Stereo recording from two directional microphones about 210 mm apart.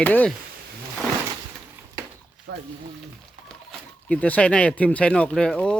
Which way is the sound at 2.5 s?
60° right (ahead or behind).